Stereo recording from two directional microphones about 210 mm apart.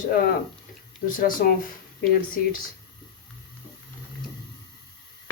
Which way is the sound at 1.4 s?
40° left (ahead or behind).